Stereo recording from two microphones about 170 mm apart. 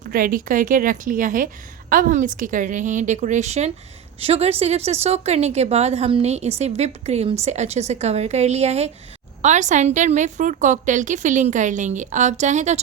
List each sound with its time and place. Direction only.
0.0 s a woman's voice: 55° right (ahead or behind)